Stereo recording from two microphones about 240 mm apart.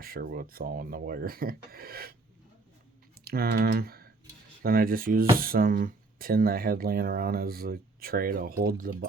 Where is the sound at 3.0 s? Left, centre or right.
Right.